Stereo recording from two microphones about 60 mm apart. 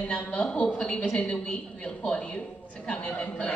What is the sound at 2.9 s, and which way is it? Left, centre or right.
Speech, centre.